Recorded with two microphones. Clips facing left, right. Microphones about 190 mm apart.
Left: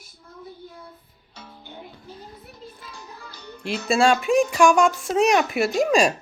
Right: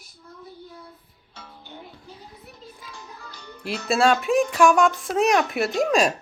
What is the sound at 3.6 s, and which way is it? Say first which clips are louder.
Speech: left 1 dB; centre (ahead or behind).